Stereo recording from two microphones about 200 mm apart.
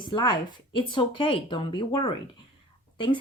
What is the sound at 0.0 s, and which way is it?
A woman's voice, 25° left (ahead or behind).